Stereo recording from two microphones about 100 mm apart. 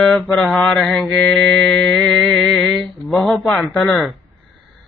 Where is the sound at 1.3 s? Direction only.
5° left (ahead or behind).